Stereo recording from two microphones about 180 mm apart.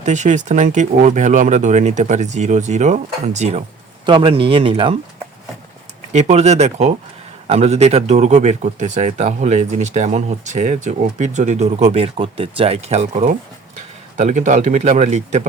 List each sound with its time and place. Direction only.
0.0 s speech: 40° right (ahead or behind)
4.0 s speech: 30° right (ahead or behind)
6.1 s speech: 40° right (ahead or behind)